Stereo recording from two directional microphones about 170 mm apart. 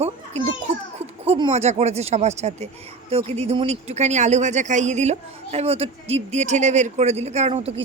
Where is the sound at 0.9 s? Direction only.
35° right (ahead or behind).